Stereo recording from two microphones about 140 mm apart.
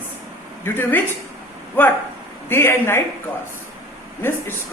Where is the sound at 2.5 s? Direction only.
15° left (ahead or behind).